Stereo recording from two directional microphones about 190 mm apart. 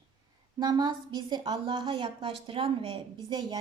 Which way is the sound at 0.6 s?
20° right (ahead or behind).